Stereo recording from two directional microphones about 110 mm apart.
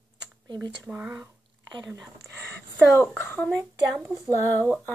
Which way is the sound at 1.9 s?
30° right (ahead or behind).